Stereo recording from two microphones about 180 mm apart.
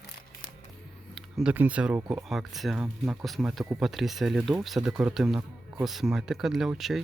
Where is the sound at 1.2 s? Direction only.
5° right (ahead or behind).